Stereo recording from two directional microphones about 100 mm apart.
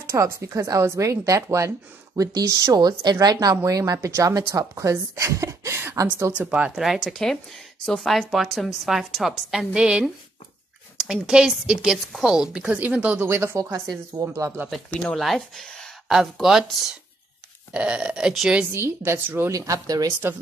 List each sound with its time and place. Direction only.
0.0 s speech: 30° right (ahead or behind)
6.3 s a woman's voice: 15° right (ahead or behind)
6.8 s a woman's voice: centre (ahead or behind)
13.3 s a woman's voice: 25° right (ahead or behind)
14.9 s a woman's voice: 10° left (ahead or behind); by 18.6 s 5° right (ahead or behind)
18.7 s a woman's voice: 25° right (ahead or behind)
19.5 s speech: 35° right (ahead or behind)